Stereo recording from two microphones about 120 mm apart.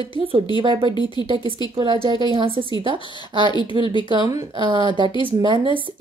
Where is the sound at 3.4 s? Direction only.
40° left (ahead or behind).